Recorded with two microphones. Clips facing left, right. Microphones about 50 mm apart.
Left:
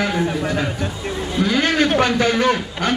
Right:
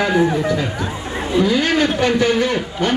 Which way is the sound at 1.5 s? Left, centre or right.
Left.